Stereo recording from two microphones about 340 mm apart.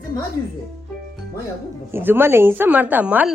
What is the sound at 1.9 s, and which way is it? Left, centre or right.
A woman's voice, centre.